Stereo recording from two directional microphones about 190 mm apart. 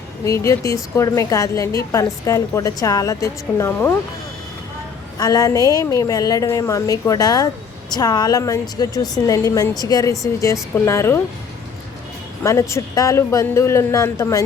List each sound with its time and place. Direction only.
0.3 s a woman's voice: 15° left (ahead or behind)
5.1 s a woman's voice: 20° left (ahead or behind)
12.4 s a woman's voice: 15° left (ahead or behind)